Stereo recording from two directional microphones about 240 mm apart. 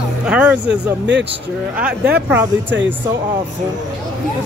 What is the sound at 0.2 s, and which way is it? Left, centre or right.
Music, centre.